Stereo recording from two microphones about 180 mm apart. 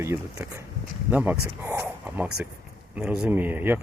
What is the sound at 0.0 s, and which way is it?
Speech, 15° right (ahead or behind).